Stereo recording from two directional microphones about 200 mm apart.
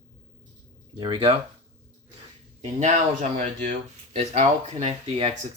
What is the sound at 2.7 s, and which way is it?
Speech, 35° right (ahead or behind).